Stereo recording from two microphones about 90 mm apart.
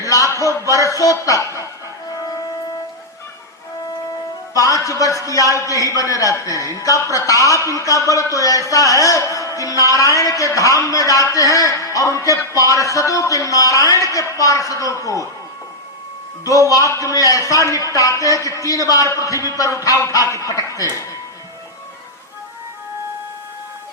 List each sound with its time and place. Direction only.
0.0 s a man's voice: 40° left (ahead or behind)
4.5 s music: 40° left (ahead or behind)
5.1 s a man's voice: 40° left (ahead or behind)
16.4 s a man's voice: 40° left (ahead or behind)